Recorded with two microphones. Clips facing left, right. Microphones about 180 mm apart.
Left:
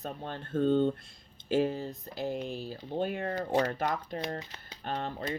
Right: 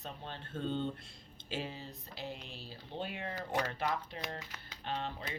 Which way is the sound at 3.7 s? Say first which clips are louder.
Left 5 dB; 45° left (ahead or behind).